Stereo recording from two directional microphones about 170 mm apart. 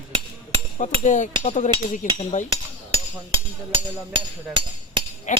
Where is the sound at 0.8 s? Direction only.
45° left (ahead or behind).